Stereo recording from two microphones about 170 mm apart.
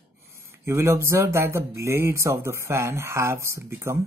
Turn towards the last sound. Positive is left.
turn(degrees=-15)  # may be behind; listen again after turning